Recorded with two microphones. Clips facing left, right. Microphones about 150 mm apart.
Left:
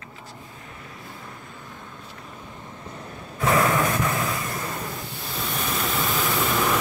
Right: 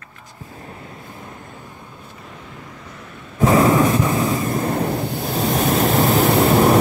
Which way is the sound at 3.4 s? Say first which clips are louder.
Right 7 dB; 30° right (ahead or behind).